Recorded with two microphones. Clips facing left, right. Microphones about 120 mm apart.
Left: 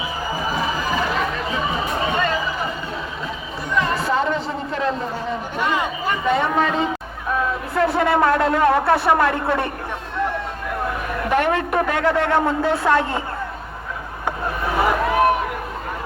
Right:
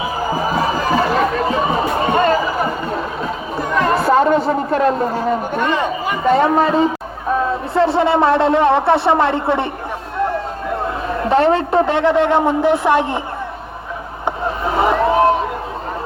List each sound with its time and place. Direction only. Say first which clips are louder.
0.3 s music: right 5 dB; 45° right (ahead or behind)
3.6 s a sound: right 5 dB; 45° right (ahead or behind)
6.2 s a man's voice: right 6 dB; 35° right (ahead or behind); by 9.6 s 20° right (ahead or behind)
10.7 s a man's voice: right 4 dB; 30° right (ahead or behind)
14.3 s vehicle: right 4 dB; 25° right (ahead or behind)